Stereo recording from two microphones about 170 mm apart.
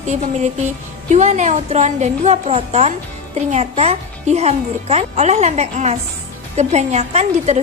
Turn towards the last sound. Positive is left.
turn(degrees=-40)  # may be behind; listen again after turning